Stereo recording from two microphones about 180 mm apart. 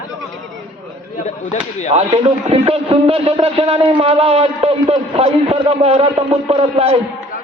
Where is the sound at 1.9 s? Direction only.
35° right (ahead or behind).